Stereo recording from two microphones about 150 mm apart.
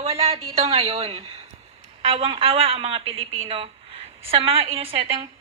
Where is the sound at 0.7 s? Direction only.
40° right (ahead or behind).